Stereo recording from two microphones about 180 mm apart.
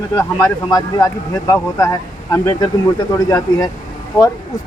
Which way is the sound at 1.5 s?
15° left (ahead or behind).